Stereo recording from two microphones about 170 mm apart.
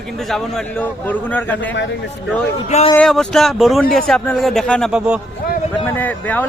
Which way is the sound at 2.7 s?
40° left (ahead or behind).